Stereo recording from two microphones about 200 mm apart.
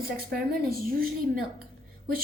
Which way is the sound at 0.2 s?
50° right (ahead or behind).